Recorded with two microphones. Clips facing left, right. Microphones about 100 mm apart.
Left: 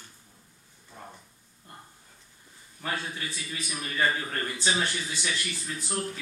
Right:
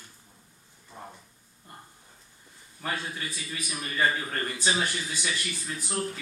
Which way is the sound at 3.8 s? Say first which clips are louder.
Right 1 dB; 5° right (ahead or behind).